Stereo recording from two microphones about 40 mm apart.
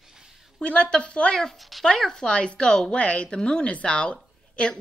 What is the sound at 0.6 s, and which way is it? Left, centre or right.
Speech, left.